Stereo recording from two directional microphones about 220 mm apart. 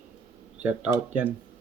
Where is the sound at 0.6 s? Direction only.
5° right (ahead or behind).